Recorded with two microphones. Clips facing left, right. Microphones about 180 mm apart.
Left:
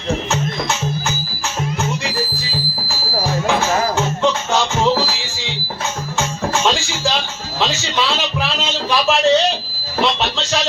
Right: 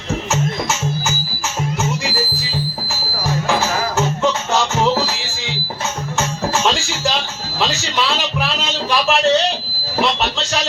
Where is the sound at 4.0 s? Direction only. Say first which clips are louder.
Even; 5° right (ahead or behind).